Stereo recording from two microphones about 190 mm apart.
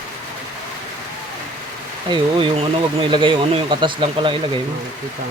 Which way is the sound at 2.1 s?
25° right (ahead or behind).